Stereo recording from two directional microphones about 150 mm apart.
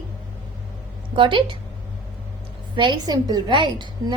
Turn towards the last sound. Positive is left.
turn(degrees=-30)  # may be behind; listen again after turning